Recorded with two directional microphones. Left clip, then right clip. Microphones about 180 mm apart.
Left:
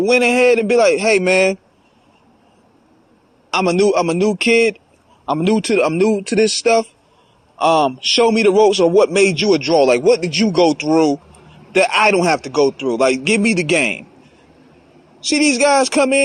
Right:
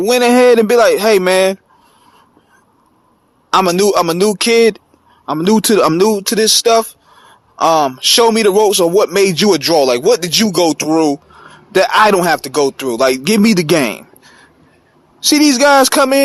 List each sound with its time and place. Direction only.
0.1 s a man's voice: 45° right (ahead or behind)
3.5 s a man's voice: 45° right (ahead or behind)
5.2 s a man's voice: 30° right (ahead or behind)
15.6 s a man's voice: 45° right (ahead or behind)